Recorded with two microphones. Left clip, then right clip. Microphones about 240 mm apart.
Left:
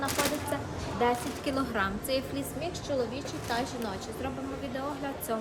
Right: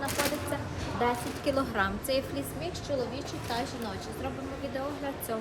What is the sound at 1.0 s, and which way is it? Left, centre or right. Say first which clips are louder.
A woman's voice: left 1 dB; centre.